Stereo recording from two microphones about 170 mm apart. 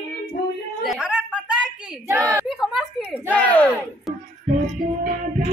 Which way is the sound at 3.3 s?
10° left (ahead or behind).